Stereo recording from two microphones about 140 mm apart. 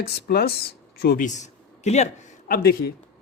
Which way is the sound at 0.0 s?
90° left.